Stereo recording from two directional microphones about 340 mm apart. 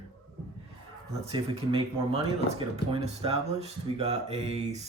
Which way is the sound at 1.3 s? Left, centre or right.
Centre.